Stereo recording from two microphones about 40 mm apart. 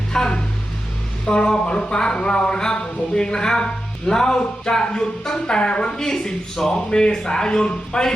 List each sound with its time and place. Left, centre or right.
0.1 s music: centre
1.3 s speech: left